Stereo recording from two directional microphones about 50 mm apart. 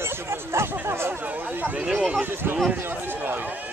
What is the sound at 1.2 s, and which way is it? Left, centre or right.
Speech, right.